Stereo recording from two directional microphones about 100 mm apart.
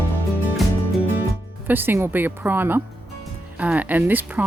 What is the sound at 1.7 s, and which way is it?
Speech, 20° right (ahead or behind).